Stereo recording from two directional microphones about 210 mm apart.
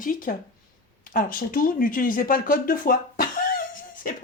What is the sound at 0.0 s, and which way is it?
Speech, 40° left (ahead or behind).